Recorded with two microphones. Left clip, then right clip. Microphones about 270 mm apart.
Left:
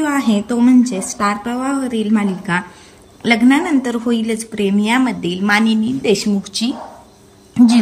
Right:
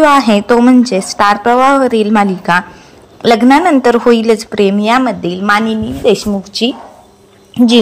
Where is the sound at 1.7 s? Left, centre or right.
Right.